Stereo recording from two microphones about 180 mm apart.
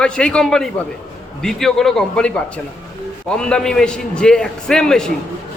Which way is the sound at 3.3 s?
5° left (ahead or behind).